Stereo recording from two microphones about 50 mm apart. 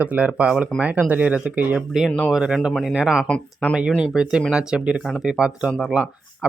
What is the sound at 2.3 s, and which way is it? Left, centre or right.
Speech, centre.